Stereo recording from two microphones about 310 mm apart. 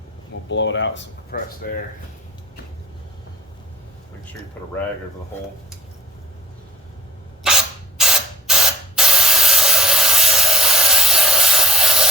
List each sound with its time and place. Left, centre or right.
0.4 s speech: left
7.4 s spray: centre